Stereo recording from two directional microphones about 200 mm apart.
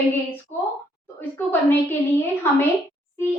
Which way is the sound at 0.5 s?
35° left (ahead or behind).